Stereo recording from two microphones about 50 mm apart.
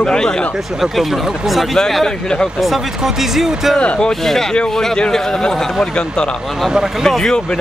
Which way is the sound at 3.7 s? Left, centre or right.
Centre.